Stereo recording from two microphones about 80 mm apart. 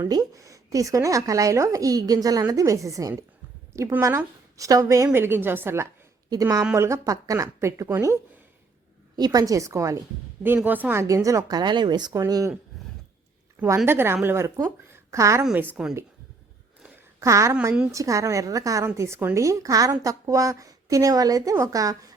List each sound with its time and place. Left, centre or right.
0.1 s speech: right
3.7 s a sound: right
4.5 s speech: right
5.1 s a woman's voice: right
6.3 s speech: right
9.1 s speech: right
10.4 s a woman's voice: right
11.0 s speech: right
12.7 s a sound: centre
13.7 s speech: right
13.9 s a woman's voice: right
15.5 s a woman's voice: right
17.2 s speech: right